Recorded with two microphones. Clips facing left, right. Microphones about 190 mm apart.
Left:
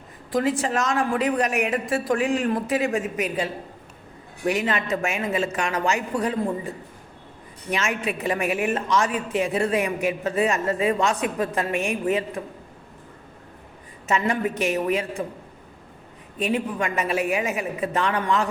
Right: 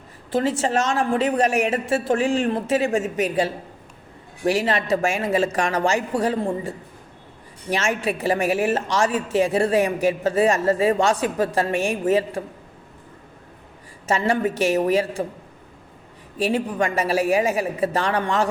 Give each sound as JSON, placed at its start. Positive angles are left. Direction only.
{"t": 0.3, "sound": "a woman's voice", "side_deg": -30}
{"t": 14.1, "sound": "a woman's voice", "side_deg": -30}
{"t": 16.4, "sound": "a woman's voice", "side_deg": -30}